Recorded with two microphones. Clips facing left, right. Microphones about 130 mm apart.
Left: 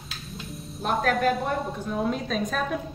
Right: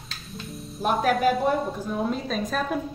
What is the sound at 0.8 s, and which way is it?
A woman's voice, centre (ahead or behind).